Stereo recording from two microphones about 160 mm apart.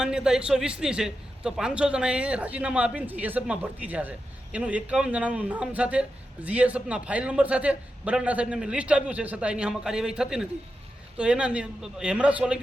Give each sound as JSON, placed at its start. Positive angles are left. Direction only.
{"t": 0.0, "sound": "a man's voice", "side_deg": -5}